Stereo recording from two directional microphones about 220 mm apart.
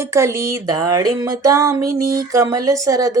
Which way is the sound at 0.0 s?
10° right (ahead or behind).